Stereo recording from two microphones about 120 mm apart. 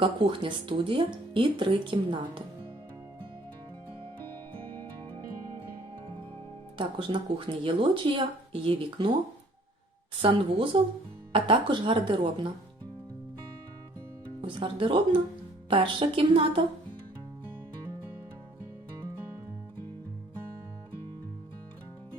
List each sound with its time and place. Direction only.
0.0 s speech: 45° right (ahead or behind)
6.7 s speech: 45° right (ahead or behind)
10.2 s speech: 45° right (ahead or behind)
14.4 s speech: 45° right (ahead or behind)